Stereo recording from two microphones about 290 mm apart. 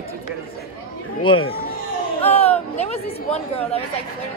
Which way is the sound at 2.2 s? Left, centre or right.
Left.